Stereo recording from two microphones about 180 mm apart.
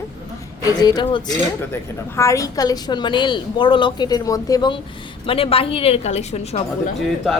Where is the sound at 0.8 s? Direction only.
25° left (ahead or behind).